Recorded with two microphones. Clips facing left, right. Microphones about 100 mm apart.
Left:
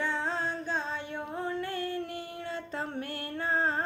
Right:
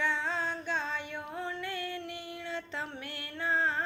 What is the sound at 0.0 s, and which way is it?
Music, 40° left (ahead or behind).